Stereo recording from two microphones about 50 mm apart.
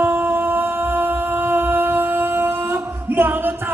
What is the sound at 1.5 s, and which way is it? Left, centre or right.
Music, right.